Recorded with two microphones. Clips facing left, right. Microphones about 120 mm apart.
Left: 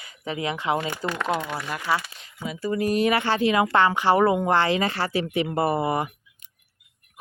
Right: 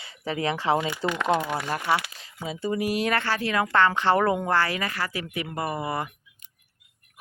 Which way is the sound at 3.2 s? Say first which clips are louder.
Left 5 dB; 20° left (ahead or behind).